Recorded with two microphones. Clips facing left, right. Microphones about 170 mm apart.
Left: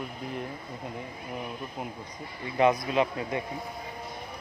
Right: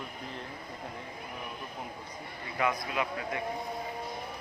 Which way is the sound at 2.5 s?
25° left (ahead or behind).